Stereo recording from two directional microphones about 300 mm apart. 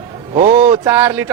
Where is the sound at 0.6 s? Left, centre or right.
Centre.